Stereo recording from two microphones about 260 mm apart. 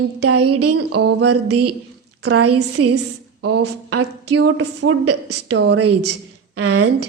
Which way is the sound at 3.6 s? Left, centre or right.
Right.